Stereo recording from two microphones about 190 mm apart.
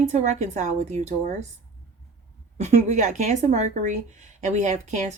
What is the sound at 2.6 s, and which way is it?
A woman's voice, 35° right (ahead or behind).